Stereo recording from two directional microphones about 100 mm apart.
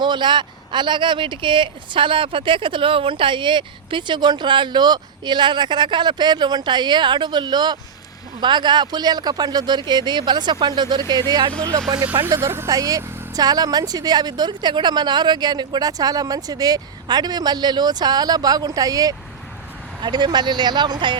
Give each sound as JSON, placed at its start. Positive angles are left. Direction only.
{"t": 0.0, "sound": "speech", "side_deg": -50}
{"t": 12.3, "sound": "speech", "side_deg": -25}
{"t": 12.6, "sound": "speech", "side_deg": -40}